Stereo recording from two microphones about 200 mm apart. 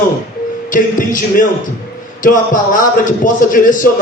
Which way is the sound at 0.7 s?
40° left (ahead or behind).